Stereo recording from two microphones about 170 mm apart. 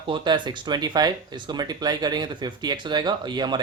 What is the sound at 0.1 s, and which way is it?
Speech, 25° right (ahead or behind).